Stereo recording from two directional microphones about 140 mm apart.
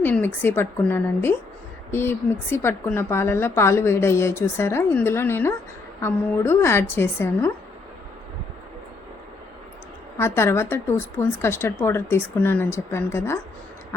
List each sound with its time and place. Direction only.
0.0 s a woman's voice: 15° left (ahead or behind)
10.2 s a woman's voice: 20° left (ahead or behind)